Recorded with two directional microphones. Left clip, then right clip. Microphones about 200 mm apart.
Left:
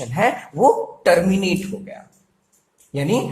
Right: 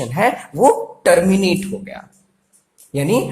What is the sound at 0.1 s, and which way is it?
A woman's voice, 25° right (ahead or behind).